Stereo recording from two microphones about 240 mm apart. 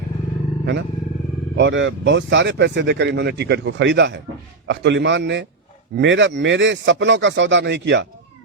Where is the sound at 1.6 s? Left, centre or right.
Right.